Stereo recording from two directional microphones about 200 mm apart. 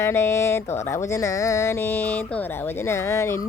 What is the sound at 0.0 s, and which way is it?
Speech, 15° left (ahead or behind).